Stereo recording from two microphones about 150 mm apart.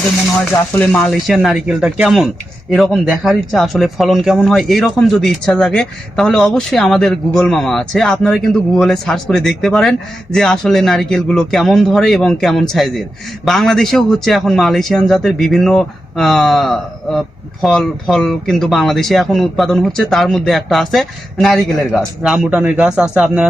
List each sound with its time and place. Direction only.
0.3 s a man's voice: 10° left (ahead or behind); by 23.5 s 5° right (ahead or behind)